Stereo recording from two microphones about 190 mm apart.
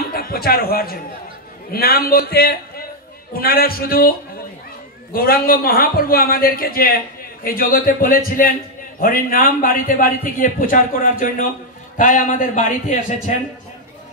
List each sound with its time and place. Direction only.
0.1 s a man's voice: 50° left (ahead or behind)
5.1 s a man's voice: 50° left (ahead or behind)